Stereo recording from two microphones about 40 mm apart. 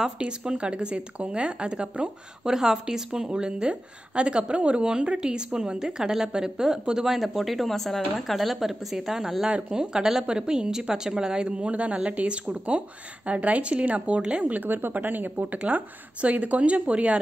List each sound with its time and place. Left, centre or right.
0.2 s a woman's voice: right
2.4 s a woman's voice: centre
7.2 s a woman's voice: centre; by 14.6 s right
14.7 s speech: right